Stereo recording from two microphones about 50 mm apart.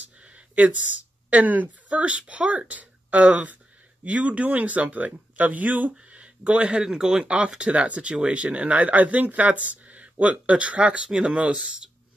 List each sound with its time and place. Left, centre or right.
0.0 s a sound: right
1.3 s speech: right
6.1 s a sound: right
6.8 s speech: centre
7.2 s speech: right
11.1 s speech: centre
11.3 s speech: right